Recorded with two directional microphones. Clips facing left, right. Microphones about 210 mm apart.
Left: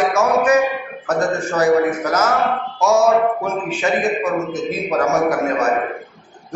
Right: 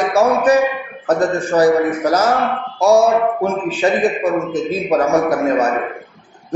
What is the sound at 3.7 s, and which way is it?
Speech, 35° right (ahead or behind).